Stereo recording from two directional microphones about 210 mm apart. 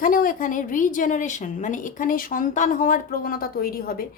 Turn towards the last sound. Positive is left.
turn(degrees=45)  # may be behind; listen again after turning